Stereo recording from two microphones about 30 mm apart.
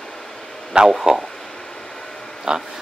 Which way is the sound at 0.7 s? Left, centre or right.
Right.